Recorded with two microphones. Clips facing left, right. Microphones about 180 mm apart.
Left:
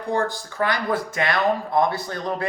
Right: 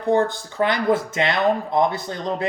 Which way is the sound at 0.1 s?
20° right (ahead or behind).